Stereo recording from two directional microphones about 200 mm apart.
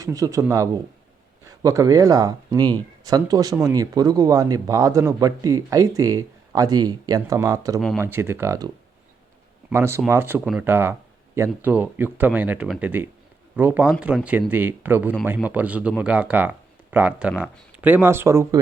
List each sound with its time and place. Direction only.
0.0 s speech: 15° right (ahead or behind)
7.8 s speech: centre (ahead or behind)
8.0 s speech: 10° right (ahead or behind)